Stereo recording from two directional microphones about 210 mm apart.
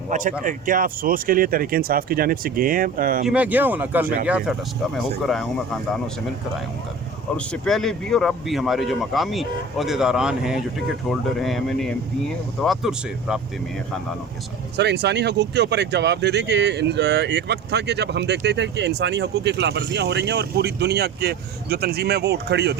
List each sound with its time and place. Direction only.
0.1 s speech: 40° right (ahead or behind)
3.2 s speech: 5° right (ahead or behind)
7.3 s speech: 5° left (ahead or behind)
14.8 s speech: 55° right (ahead or behind)